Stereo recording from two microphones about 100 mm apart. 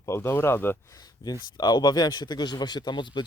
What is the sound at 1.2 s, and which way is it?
Speech, 45° left (ahead or behind).